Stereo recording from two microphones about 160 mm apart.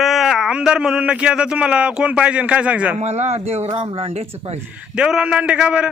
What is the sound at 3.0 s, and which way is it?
Speech, 45° right (ahead or behind).